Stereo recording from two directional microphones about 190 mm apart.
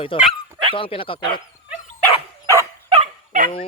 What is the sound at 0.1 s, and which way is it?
Speech, 30° left (ahead or behind).